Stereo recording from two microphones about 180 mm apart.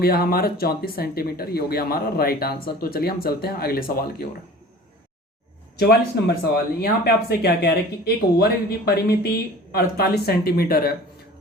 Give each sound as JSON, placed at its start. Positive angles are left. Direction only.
{"t": 0.0, "sound": "speech", "side_deg": 55}
{"t": 5.8, "sound": "speech", "side_deg": 60}